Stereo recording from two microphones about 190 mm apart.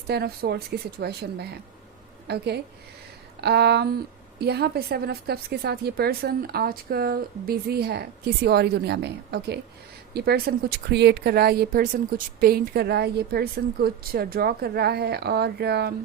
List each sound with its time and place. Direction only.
0.1 s a woman's voice: 55° right (ahead or behind)